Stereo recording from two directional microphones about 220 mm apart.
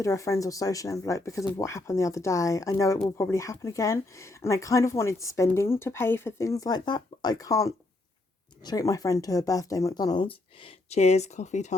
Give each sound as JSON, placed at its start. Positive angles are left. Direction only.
{"t": 0.0, "sound": "speech", "side_deg": 15}